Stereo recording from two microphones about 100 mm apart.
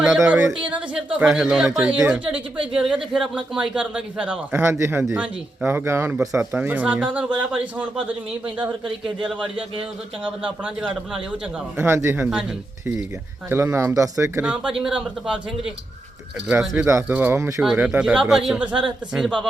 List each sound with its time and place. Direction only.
0.7 s speech: 10° right (ahead or behind)
4.5 s a man's voice: 25° right (ahead or behind)
6.1 s speech: 5° right (ahead or behind)
10.2 s speech: 15° right (ahead or behind)
11.8 s a man's voice: 25° right (ahead or behind)
13.5 s a man's voice: 25° right (ahead or behind)
14.4 s speech: 10° right (ahead or behind)
17.1 s a man's voice: 20° right (ahead or behind)
17.6 s speech: 10° right (ahead or behind)